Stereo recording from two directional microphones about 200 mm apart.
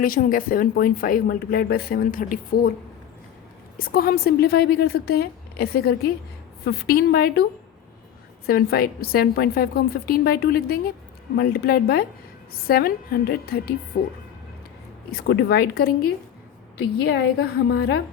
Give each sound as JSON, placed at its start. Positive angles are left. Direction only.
{"t": 0.0, "sound": "a woman's voice", "side_deg": 45}
{"t": 3.8, "sound": "a woman's voice", "side_deg": 45}
{"t": 8.4, "sound": "a woman's voice", "side_deg": 50}
{"t": 15.1, "sound": "a woman's voice", "side_deg": 55}
{"t": 17.4, "sound": "a woman's voice", "side_deg": 55}